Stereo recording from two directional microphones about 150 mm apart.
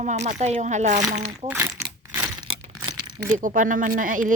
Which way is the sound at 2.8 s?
30° right (ahead or behind).